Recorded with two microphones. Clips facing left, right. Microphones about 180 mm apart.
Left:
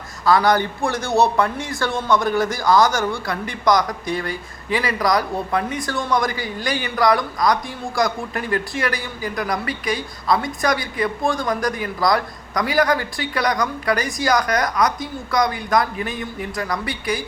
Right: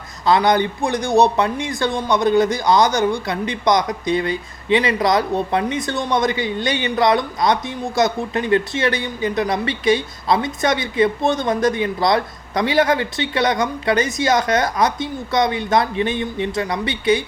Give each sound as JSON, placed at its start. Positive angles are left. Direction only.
{"t": 0.3, "sound": "a man's voice", "side_deg": -20}